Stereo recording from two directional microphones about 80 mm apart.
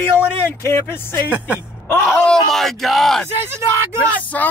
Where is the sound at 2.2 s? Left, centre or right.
Centre.